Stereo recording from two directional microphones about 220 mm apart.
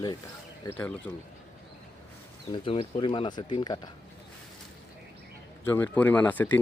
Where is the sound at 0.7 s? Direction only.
10° left (ahead or behind).